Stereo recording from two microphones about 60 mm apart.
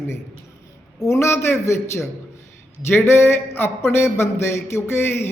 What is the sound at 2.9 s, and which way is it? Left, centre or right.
Speech, left.